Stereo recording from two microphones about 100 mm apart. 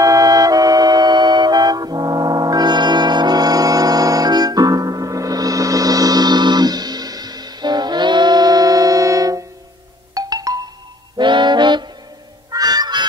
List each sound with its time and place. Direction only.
0.0 s music: 35° right (ahead or behind)
11.1 s music: 50° right (ahead or behind)
12.4 s a sound: 40° right (ahead or behind)